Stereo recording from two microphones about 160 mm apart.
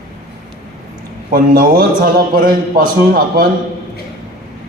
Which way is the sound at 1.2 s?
60° right (ahead or behind).